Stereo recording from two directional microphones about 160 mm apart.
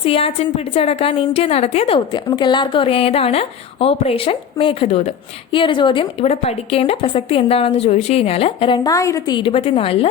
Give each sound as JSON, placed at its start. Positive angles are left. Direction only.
{"t": 0.0, "sound": "a woman's voice", "side_deg": 35}
{"t": 2.3, "sound": "a woman's voice", "side_deg": 30}
{"t": 9.4, "sound": "a woman's voice", "side_deg": 40}